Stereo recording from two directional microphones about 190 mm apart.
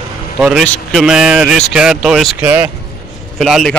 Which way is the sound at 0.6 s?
5° left (ahead or behind).